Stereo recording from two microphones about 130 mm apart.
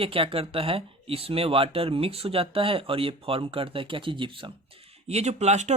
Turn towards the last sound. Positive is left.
turn(degrees=-60)  # may be behind; listen again after turning